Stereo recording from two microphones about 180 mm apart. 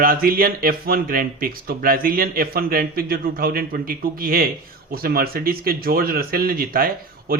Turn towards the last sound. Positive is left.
turn(degrees=-55)  # may be behind; listen again after turning